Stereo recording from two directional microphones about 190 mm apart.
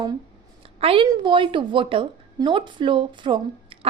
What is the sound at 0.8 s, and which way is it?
A woman's voice, 30° right (ahead or behind).